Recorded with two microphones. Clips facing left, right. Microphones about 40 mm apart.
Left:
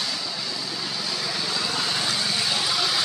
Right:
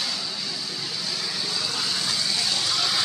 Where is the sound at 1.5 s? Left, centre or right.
Left.